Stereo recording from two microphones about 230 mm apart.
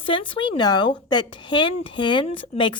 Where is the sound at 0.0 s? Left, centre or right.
Left.